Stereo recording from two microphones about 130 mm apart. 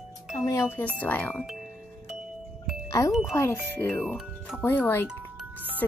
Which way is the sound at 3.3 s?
20° left (ahead or behind).